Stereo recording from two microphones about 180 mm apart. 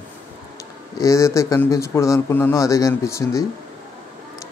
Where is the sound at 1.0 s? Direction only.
15° left (ahead or behind).